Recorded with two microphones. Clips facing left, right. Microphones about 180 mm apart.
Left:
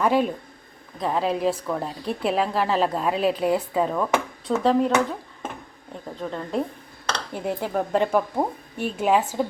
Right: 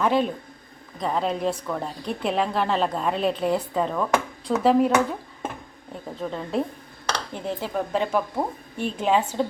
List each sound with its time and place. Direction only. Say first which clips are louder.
0.0 s a woman's voice: left 1 dB; 10° left (ahead or behind); by 4.9 s 10° right (ahead or behind)
6.1 s a woman's voice: even; centre (ahead or behind)
7.3 s a woman's voice: left 4 dB; 10° left (ahead or behind)